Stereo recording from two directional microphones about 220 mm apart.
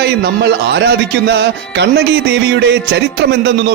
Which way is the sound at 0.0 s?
50° right (ahead or behind).